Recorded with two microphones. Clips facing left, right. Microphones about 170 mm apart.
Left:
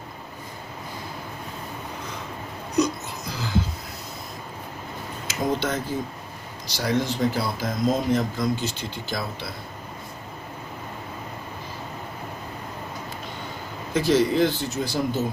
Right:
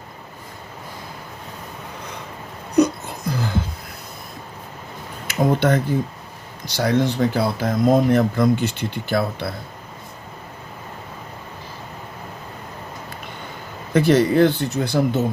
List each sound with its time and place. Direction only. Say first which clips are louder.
2.7 s music: right 6 dB; 55° right (ahead or behind)
5.3 s speech: right 7 dB; 60° right (ahead or behind)
13.9 s speech: right 5 dB; 65° right (ahead or behind)